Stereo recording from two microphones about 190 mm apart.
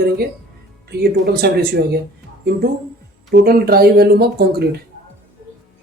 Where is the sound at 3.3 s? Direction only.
50° right (ahead or behind).